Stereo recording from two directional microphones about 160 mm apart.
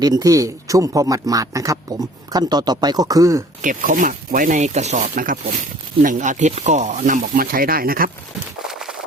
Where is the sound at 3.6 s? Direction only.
55° right (ahead or behind).